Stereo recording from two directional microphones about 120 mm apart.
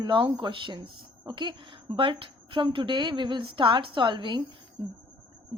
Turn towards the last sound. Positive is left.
turn(degrees=-40)  # may be behind; listen again after turning